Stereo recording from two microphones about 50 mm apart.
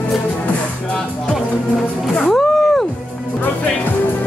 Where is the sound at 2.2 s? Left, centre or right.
Centre.